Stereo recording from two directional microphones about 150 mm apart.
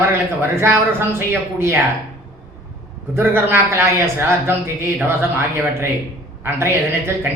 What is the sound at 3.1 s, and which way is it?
Speech, 15° right (ahead or behind).